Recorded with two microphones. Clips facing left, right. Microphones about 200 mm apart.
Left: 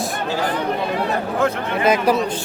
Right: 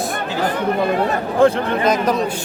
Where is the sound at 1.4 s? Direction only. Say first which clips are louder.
Right 8 dB; 30° right (ahead or behind).